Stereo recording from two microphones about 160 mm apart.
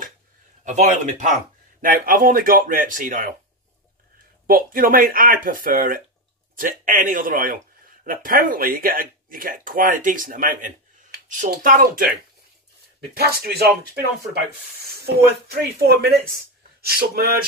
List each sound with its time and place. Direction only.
0.7 s a man's voice: 50° right (ahead or behind)
1.8 s speech: 60° right (ahead or behind)
4.5 s speech: 60° right (ahead or behind)
13.1 s speech: 80° right
15.0 s speech: 75° right (ahead or behind)